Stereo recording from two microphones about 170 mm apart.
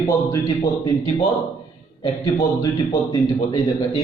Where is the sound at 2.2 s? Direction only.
20° left (ahead or behind).